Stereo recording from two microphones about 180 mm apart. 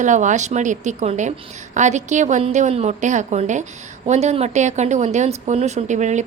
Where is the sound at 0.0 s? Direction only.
45° right (ahead or behind).